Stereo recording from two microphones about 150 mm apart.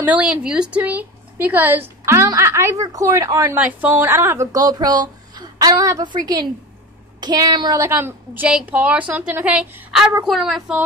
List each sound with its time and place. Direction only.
0.0 s a woman's voice: 10° right (ahead or behind); by 7.8 s 25° right (ahead or behind)
7.8 s a woman's voice: 15° right (ahead or behind)